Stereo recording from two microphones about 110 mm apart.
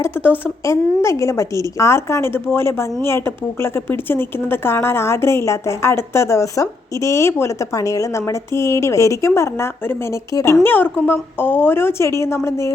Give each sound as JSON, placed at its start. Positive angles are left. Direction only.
{"t": 0.6, "sound": "a woman's voice", "side_deg": 25}